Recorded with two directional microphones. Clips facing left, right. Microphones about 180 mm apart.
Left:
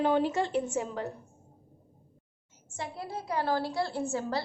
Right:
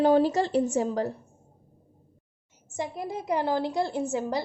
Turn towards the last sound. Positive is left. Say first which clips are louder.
# right 3 dB
turn(degrees=-20)  # may be behind; listen again after turning